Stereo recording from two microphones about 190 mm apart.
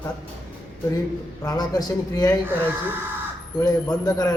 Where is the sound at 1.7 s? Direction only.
20° left (ahead or behind).